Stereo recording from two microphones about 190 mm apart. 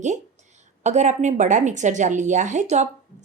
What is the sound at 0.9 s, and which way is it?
Speech, 40° right (ahead or behind).